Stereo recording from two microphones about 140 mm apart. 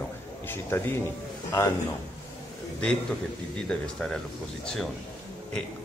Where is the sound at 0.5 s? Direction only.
15° left (ahead or behind).